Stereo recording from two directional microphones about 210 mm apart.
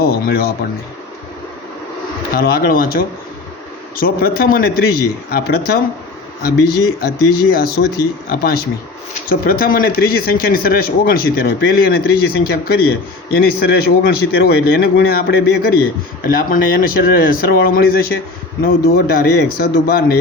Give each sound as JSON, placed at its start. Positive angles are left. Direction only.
{"t": 0.0, "sound": "speech", "side_deg": 45}
{"t": 2.3, "sound": "speech", "side_deg": 45}
{"t": 7.5, "sound": "speech", "side_deg": 45}